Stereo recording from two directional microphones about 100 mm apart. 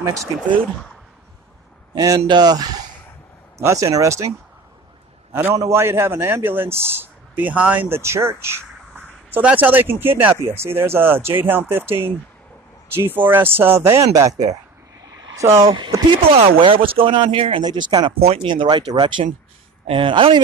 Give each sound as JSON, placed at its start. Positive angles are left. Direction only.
{"t": 2.0, "sound": "speech", "side_deg": -40}
{"t": 5.3, "sound": "a man's voice", "side_deg": -25}
{"t": 15.0, "sound": "a sound", "side_deg": -40}
{"t": 15.4, "sound": "speech", "side_deg": -25}
{"t": 16.1, "sound": "speech", "side_deg": -75}
{"t": 17.6, "sound": "speech", "side_deg": -45}
{"t": 18.1, "sound": "speech", "side_deg": -75}
{"t": 18.5, "sound": "speech", "side_deg": -50}